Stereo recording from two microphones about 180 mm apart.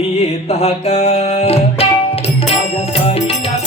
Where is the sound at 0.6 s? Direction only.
35° left (ahead or behind).